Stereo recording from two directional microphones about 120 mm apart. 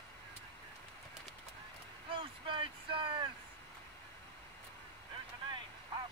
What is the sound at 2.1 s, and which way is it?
Vehicle, 45° right (ahead or behind).